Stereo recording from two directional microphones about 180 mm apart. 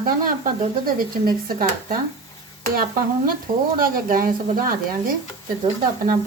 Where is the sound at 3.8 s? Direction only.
50° right (ahead or behind).